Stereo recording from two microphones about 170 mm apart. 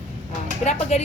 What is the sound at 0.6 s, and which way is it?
Speech, 40° left (ahead or behind).